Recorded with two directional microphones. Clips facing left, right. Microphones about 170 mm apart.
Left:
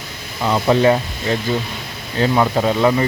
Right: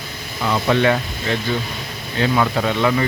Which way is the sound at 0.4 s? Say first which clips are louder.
Left 3 dB; 30° left (ahead or behind).